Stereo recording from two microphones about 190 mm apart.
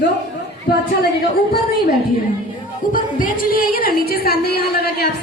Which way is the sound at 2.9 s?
45° left (ahead or behind).